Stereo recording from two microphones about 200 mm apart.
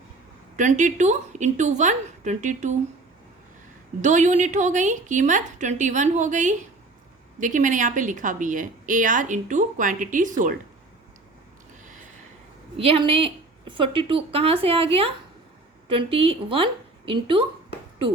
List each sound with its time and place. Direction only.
0.5 s a woman's voice: 35° right (ahead or behind)
4.0 s a woman's voice: 35° right (ahead or behind)
12.7 s a woman's voice: 30° right (ahead or behind)